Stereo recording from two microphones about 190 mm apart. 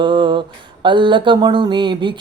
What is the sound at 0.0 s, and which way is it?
Speech, 25° right (ahead or behind).